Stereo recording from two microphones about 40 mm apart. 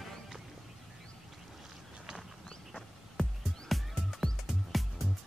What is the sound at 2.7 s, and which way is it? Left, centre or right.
Music, centre.